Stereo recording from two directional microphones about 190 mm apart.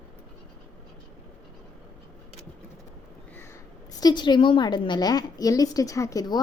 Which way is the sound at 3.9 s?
20° left (ahead or behind).